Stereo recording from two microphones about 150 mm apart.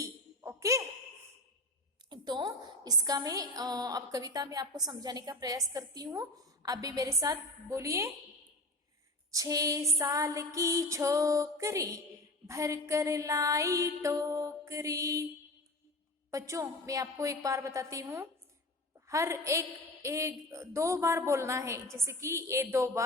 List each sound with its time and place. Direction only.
0.0 s a sound: 20° right (ahead or behind)
2.0 s a woman's voice: 30° right (ahead or behind)
9.3 s a woman's voice: 20° right (ahead or behind)
16.3 s a woman's voice: 20° right (ahead or behind)